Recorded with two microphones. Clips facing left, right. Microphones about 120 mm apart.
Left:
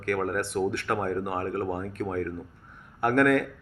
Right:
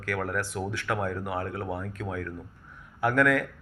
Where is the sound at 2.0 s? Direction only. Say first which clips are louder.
Left 5 dB; 40° left (ahead or behind).